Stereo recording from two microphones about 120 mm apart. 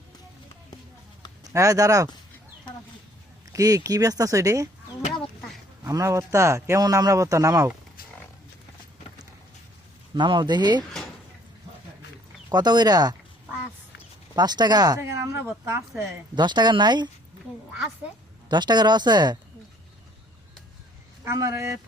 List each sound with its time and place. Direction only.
1.5 s speech: 30° right (ahead or behind)
3.5 s speech: 30° right (ahead or behind)
5.8 s speech: 25° right (ahead or behind)
10.2 s speech: 40° right (ahead or behind)
12.5 s speech: 35° right (ahead or behind)
14.3 s speech: 35° right (ahead or behind)
16.3 s speech: 40° right (ahead or behind)
18.4 s speech: 35° right (ahead or behind)
21.2 s speech: 25° right (ahead or behind)